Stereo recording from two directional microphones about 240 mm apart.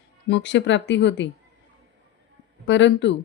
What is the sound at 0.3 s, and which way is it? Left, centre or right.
Speech, left.